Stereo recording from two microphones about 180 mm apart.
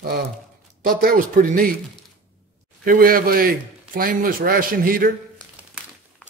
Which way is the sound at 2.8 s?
50° right (ahead or behind).